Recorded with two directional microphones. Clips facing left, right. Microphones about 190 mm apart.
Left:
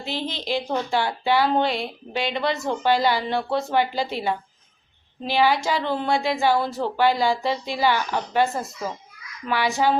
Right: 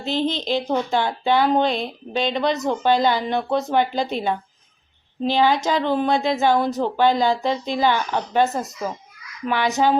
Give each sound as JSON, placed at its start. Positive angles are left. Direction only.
{"t": 0.0, "sound": "speech", "side_deg": -20}